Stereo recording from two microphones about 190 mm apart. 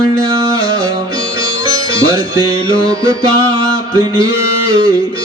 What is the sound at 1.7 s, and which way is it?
Music, 20° right (ahead or behind).